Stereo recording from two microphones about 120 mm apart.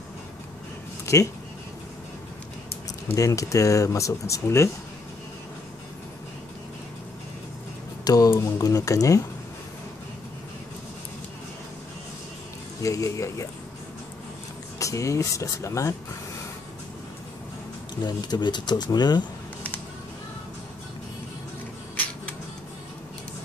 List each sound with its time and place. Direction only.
1.0 s a sound: 25° left (ahead or behind)
3.2 s speech: 25° left (ahead or behind)
8.0 s speech: 30° left (ahead or behind)
12.8 s speech: 25° left (ahead or behind)
14.8 s speech: 25° left (ahead or behind)
18.0 s speech: 35° left (ahead or behind)
21.9 s a sound: 15° left (ahead or behind)